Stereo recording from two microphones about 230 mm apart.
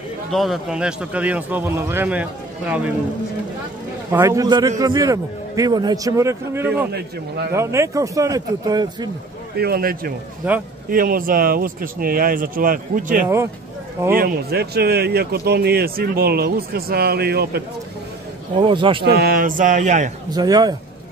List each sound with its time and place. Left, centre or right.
0.3 s a man's voice: centre
4.1 s a man's voice: centre
9.6 s speech: right
10.4 s a man's voice: centre
10.9 s a man's voice: right
18.6 s speech: right
19.0 s speech: right
20.2 s a man's voice: centre